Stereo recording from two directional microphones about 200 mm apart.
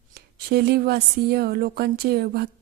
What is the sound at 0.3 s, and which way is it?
Speech, 50° right (ahead or behind).